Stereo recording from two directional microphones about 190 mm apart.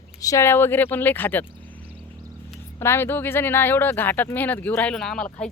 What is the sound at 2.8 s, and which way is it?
Speech, 10° left (ahead or behind).